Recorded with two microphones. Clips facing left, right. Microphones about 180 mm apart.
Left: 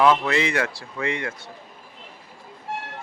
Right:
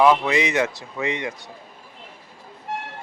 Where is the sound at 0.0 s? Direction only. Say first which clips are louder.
Right 2 dB; 15° right (ahead or behind).